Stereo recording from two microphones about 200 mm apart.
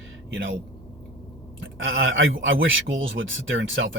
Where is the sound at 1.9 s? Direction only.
75° right (ahead or behind).